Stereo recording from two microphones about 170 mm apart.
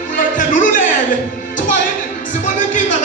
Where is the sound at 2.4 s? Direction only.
50° left (ahead or behind).